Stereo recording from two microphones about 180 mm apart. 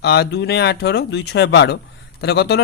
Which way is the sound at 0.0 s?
65° left (ahead or behind).